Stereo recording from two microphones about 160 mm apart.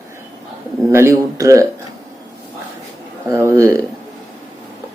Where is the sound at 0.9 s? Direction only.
20° right (ahead or behind).